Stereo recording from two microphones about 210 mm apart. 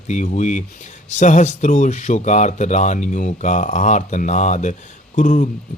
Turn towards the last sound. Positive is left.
turn(degrees=40)  # may be behind; listen again after turning